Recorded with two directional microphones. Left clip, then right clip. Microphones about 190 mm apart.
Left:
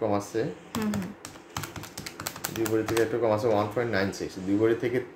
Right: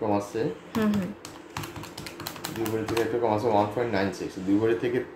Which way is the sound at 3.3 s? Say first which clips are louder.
Right 1 dB; 40° left (ahead or behind).